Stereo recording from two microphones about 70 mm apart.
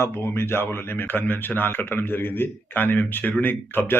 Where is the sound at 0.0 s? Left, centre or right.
Left.